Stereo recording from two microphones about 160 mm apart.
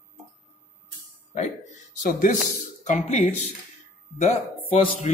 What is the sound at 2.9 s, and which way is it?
Speech, 45° left (ahead or behind).